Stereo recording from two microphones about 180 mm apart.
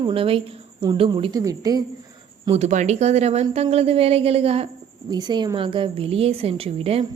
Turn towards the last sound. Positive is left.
turn(degrees=-35)  # may be behind; listen again after turning